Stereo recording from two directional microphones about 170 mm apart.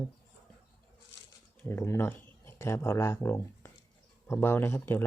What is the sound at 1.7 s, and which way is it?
Speech, 15° left (ahead or behind).